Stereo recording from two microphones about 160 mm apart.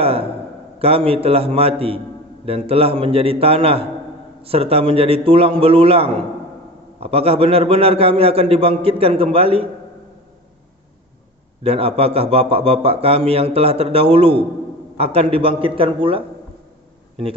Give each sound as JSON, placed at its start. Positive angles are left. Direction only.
{"t": 0.0, "sound": "a sound", "side_deg": -35}
{"t": 0.7, "sound": "speech", "side_deg": -35}
{"t": 11.6, "sound": "speech", "side_deg": -35}